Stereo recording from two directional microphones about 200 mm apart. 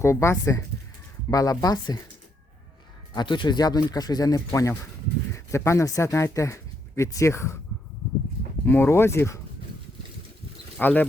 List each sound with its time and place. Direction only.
0.0 s speech: 15° left (ahead or behind)
3.2 s speech: 25° left (ahead or behind)
8.6 s speech: 10° left (ahead or behind)
10.8 s speech: 10° left (ahead or behind)